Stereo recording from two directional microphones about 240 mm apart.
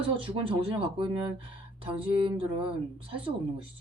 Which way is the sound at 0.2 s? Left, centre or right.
Right.